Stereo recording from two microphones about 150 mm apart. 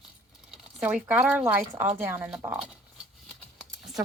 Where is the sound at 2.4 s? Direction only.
5° right (ahead or behind).